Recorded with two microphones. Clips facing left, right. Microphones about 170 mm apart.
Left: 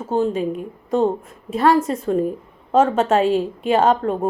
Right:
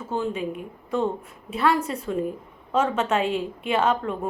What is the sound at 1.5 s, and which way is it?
A woman's voice, 40° left (ahead or behind).